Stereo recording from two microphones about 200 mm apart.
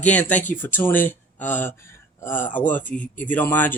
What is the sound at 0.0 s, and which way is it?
Speech, 5° left (ahead or behind).